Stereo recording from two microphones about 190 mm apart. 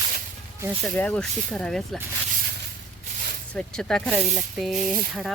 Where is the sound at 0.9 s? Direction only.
5° left (ahead or behind).